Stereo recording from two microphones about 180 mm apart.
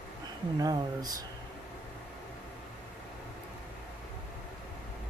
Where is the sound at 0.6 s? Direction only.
20° right (ahead or behind).